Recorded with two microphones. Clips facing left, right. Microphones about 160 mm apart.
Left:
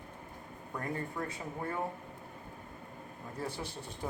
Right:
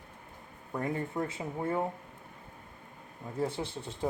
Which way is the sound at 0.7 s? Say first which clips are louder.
Right 5 dB; 25° right (ahead or behind).